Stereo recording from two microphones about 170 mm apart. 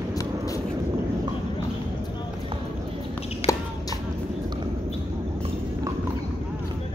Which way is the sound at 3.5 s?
20° left (ahead or behind).